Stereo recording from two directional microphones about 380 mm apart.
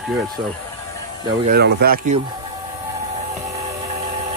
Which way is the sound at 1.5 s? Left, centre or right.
Right.